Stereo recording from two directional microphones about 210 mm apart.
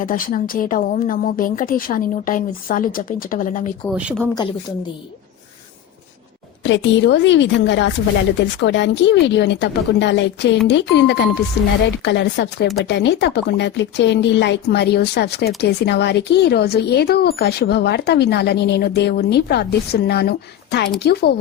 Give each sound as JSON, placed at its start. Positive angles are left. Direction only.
{"t": 0.0, "sound": "speech", "side_deg": 40}
{"t": 3.8, "sound": "speech", "side_deg": 0}
{"t": 6.6, "sound": "a woman's voice", "side_deg": 60}